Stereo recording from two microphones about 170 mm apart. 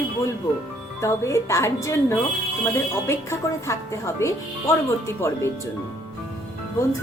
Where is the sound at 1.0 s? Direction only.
15° left (ahead or behind).